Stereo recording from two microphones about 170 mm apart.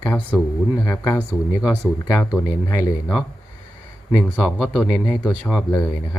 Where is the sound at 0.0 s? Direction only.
15° left (ahead or behind).